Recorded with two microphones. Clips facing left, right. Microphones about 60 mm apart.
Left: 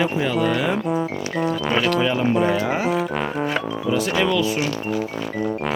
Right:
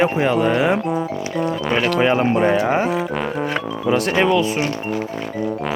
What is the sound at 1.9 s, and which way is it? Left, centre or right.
Speech, right.